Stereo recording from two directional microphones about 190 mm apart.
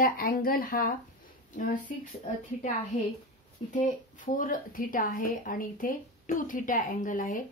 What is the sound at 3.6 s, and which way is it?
Speech, 30° left (ahead or behind).